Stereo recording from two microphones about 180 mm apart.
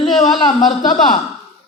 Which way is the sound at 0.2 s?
25° left (ahead or behind).